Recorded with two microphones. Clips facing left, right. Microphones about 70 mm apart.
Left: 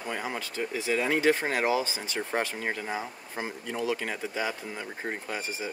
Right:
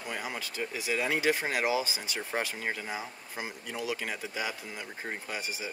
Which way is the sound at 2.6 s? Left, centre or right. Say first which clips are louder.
Left 2 dB; centre.